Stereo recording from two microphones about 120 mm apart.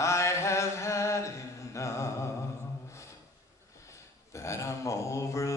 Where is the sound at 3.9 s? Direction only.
25° left (ahead or behind).